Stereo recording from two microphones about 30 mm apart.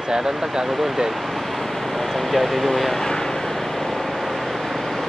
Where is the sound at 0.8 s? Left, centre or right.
Centre.